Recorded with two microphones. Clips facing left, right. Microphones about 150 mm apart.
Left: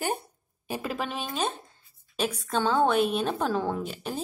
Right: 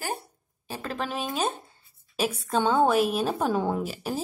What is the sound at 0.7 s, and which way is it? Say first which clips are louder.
Speech: left 1 dB; 10° left (ahead or behind).